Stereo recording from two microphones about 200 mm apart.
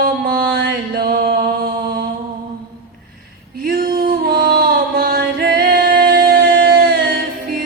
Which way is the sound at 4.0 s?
50° right (ahead or behind).